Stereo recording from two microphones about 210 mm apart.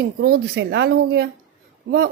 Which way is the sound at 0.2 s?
50° right (ahead or behind).